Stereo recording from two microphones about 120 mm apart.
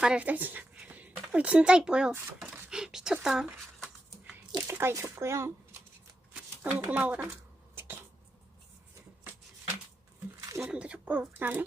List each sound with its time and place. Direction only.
0.0 s speech: 10° right (ahead or behind)
2.6 s a sound: 5° right (ahead or behind)
4.6 s speech: 20° right (ahead or behind)
10.7 s speech: 10° right (ahead or behind)